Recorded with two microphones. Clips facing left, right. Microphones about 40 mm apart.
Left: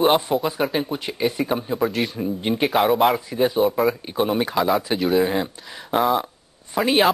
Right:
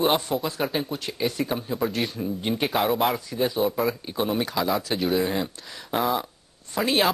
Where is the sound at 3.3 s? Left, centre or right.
Centre.